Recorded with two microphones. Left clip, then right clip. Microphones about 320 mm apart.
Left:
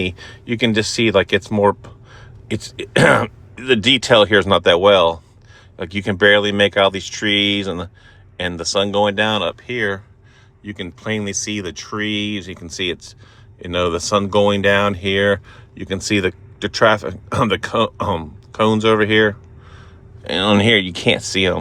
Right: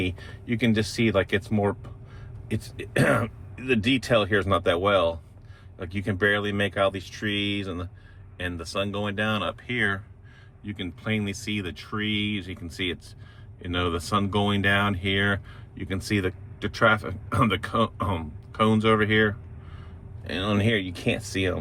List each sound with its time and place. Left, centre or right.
0.0 s speech: left